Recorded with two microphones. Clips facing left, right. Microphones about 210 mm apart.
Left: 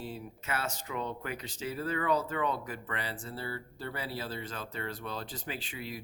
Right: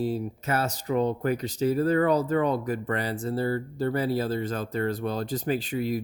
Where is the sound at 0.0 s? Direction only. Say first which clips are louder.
Right 13 dB; 40° right (ahead or behind).